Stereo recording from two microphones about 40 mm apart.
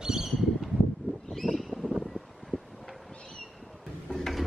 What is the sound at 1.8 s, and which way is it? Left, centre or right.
Wind, left.